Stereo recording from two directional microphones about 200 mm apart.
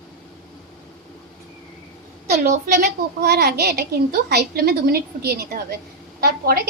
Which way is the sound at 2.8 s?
50° right (ahead or behind).